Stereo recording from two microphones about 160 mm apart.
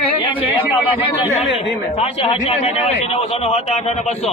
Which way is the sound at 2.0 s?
40° left (ahead or behind).